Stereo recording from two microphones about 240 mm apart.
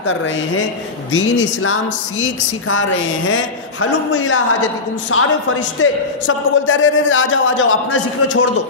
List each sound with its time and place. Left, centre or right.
1.1 s a man's voice: left